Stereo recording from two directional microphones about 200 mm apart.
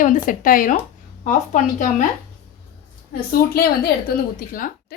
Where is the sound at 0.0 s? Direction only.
40° left (ahead or behind).